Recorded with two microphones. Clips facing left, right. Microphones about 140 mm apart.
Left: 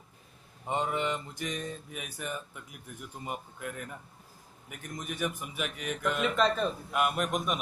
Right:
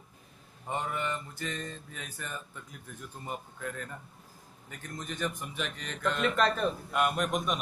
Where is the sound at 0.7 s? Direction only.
20° left (ahead or behind).